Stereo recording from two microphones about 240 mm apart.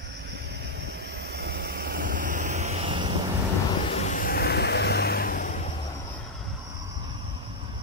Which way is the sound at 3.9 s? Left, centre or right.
Left.